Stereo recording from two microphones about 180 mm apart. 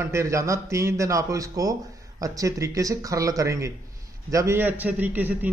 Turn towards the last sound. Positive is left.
turn(degrees=-10)  # may be behind; listen again after turning